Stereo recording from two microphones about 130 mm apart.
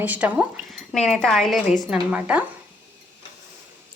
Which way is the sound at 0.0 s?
10° right (ahead or behind).